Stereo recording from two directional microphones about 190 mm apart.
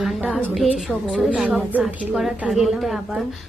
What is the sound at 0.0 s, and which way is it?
A woman's voice, centre (ahead or behind).